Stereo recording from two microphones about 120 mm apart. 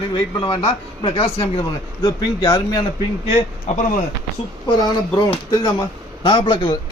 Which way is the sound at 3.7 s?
90° left.